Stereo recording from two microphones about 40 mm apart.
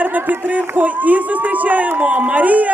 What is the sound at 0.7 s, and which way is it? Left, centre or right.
A woman's voice, right.